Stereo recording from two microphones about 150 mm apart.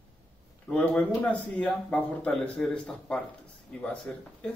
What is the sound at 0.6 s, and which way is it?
Speech, 10° left (ahead or behind).